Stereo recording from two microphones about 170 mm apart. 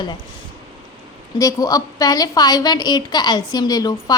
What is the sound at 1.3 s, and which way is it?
A woman's voice, 20° left (ahead or behind).